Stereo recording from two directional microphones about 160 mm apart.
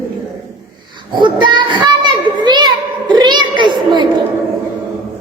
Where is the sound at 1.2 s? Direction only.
30° right (ahead or behind).